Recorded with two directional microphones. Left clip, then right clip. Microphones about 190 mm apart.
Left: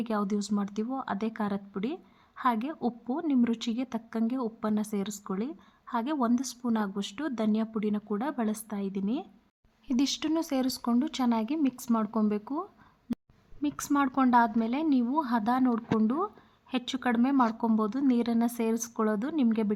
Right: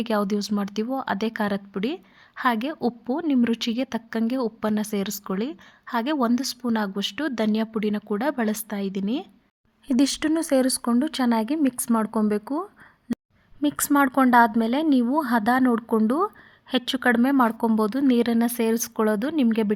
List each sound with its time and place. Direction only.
0.0 s speech: 25° right (ahead or behind)